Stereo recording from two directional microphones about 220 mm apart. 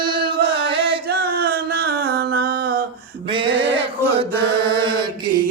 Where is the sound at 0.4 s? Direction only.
25° right (ahead or behind).